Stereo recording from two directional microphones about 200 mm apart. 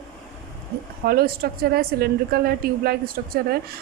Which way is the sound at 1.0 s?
50° right (ahead or behind).